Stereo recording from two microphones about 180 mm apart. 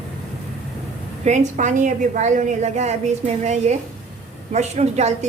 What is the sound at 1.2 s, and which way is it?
A woman's voice, 40° right (ahead or behind).